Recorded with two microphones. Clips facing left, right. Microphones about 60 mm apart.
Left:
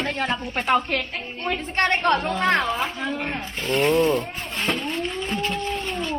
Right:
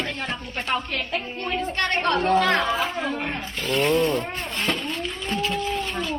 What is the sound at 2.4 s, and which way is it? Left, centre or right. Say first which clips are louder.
Speech: even; centre.